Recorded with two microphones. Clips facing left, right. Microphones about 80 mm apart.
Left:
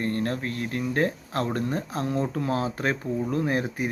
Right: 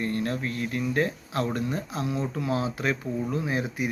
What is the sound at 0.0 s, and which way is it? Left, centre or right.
Speech, left.